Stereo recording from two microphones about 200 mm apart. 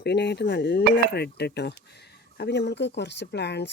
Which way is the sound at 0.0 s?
55° left (ahead or behind).